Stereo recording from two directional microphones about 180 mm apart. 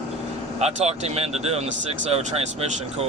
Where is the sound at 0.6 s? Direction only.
35° right (ahead or behind).